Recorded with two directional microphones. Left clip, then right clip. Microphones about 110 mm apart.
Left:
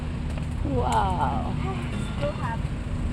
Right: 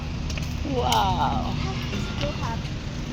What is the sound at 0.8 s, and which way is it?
Speech, 45° left (ahead or behind).